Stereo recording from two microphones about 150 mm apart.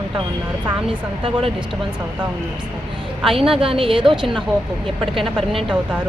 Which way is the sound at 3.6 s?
40° right (ahead or behind).